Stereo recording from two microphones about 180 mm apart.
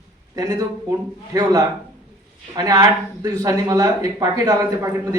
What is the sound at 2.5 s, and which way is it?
A man's voice, 20° right (ahead or behind).